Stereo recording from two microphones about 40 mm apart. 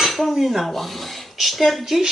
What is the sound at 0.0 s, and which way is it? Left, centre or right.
Cutlery, centre.